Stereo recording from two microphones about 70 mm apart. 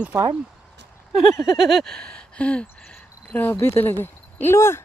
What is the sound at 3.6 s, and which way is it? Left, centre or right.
Speech, left.